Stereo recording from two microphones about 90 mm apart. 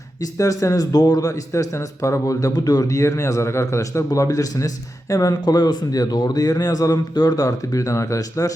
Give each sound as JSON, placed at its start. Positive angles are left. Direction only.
{"t": 0.2, "sound": "a man's voice", "side_deg": 40}